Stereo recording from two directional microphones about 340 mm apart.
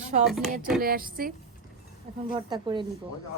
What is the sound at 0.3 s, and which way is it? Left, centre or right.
Speech, centre.